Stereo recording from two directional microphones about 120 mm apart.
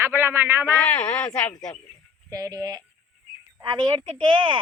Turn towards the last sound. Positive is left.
turn(degrees=-40)  # may be behind; listen again after turning